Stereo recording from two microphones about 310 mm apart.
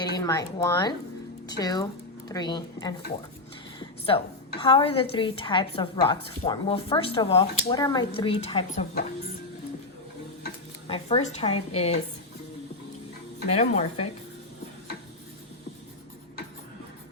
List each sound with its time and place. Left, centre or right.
0.0 s speech: centre
3.8 s a sound: centre
4.6 s a woman's voice: centre
10.8 s a woman's voice: centre
13.6 s a woman's voice: left